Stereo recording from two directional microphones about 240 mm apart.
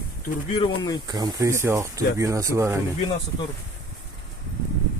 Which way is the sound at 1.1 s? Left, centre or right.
Centre.